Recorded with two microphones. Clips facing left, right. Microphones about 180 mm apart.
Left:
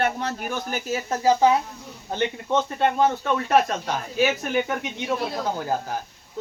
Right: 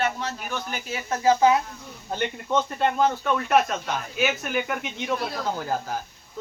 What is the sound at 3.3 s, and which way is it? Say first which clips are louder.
Speech: left 1 dB; 35° left (ahead or behind).